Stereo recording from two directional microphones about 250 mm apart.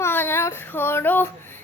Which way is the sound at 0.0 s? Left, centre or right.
Centre.